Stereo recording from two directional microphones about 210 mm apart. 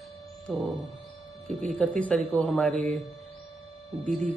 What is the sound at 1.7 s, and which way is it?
A man's voice, 5° left (ahead or behind).